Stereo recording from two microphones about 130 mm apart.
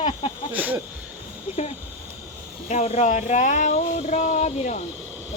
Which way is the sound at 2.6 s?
60° left (ahead or behind).